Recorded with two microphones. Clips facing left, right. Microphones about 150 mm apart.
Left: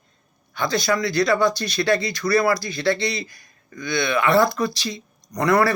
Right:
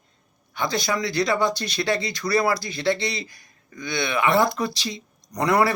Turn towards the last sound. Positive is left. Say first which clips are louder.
# left 2 dB
turn(degrees=-20)  # may be behind; listen again after turning